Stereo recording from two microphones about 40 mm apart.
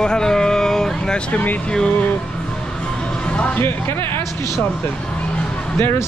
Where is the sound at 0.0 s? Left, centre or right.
Centre.